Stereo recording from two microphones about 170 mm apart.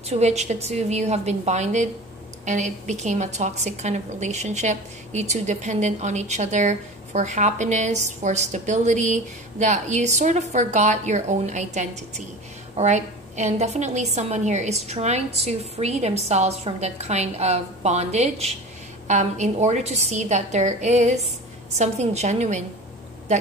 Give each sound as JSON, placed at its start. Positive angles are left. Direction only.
{"t": 0.1, "sound": "a woman's voice", "side_deg": -40}